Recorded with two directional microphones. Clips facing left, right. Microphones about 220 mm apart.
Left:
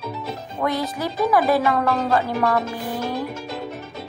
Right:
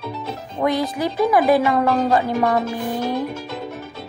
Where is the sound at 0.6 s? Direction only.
15° right (ahead or behind).